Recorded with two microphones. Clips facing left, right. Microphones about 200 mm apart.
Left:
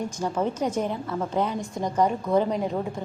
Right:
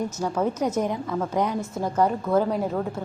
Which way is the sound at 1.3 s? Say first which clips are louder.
Even; 10° right (ahead or behind).